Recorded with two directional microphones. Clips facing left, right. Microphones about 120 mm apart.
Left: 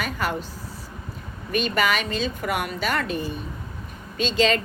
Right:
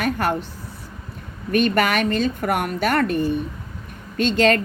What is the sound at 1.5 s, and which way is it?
A woman's voice, 55° right (ahead or behind).